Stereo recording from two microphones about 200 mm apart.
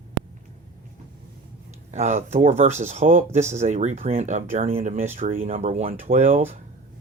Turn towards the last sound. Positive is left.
turn(degrees=-40)  # may be behind; listen again after turning